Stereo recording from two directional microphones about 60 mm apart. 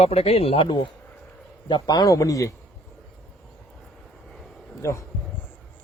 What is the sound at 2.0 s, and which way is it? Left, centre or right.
Speech, left.